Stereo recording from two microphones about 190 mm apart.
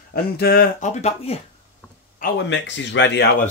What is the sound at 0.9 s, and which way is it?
Speech, 35° left (ahead or behind).